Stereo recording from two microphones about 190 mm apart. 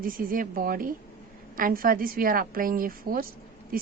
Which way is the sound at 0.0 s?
50° right (ahead or behind).